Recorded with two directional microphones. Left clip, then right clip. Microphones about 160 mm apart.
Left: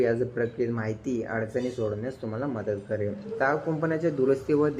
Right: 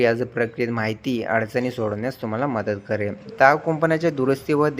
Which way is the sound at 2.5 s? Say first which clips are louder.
Right 6 dB; 35° right (ahead or behind).